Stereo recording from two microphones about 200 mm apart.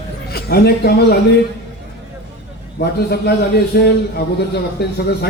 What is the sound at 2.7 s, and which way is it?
A man's voice, 50° left (ahead or behind).